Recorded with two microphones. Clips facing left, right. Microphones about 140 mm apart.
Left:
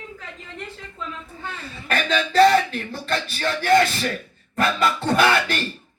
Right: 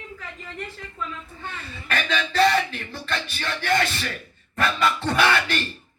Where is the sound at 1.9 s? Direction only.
45° left (ahead or behind).